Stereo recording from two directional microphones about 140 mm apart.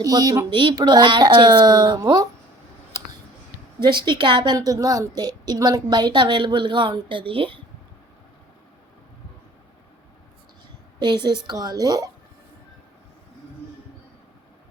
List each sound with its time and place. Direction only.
0.0 s speech: 25° right (ahead or behind)
3.8 s a woman's voice: 35° right (ahead or behind)
11.0 s speech: 30° right (ahead or behind)